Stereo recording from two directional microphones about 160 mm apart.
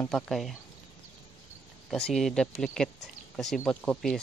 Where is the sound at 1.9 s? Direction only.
Centre (ahead or behind).